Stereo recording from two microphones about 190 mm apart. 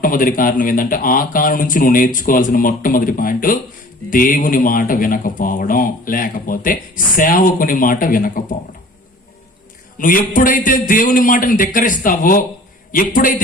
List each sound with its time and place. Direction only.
0.0 s speech: 45° left (ahead or behind)
10.0 s speech: 45° left (ahead or behind)